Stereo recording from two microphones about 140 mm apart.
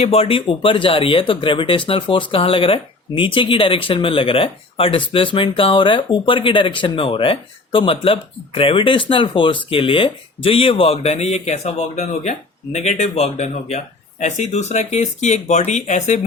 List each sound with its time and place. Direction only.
0.0 s speech: 45° left (ahead or behind)